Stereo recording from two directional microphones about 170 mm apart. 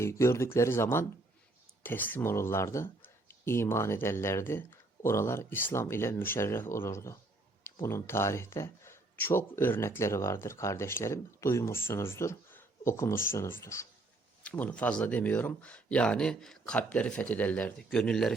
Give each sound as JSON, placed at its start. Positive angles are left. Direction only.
{"t": 0.0, "sound": "speech", "side_deg": 15}